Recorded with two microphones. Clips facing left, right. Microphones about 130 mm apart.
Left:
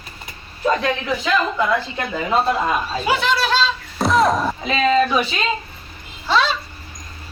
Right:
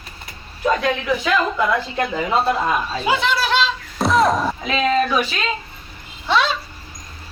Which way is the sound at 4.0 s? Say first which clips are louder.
Even; centre (ahead or behind).